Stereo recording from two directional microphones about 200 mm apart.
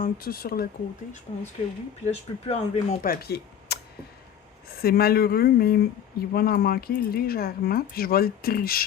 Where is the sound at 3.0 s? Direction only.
50° left (ahead or behind).